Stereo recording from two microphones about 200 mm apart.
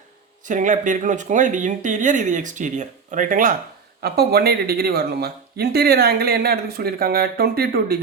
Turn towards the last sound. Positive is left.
turn(degrees=-50)  # may be behind; listen again after turning